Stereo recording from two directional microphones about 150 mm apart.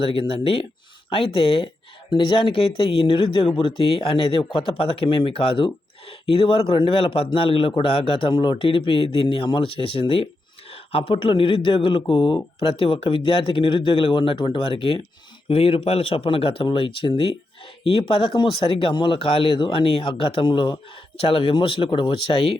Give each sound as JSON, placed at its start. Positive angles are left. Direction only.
{"t": 0.0, "sound": "speech", "side_deg": 40}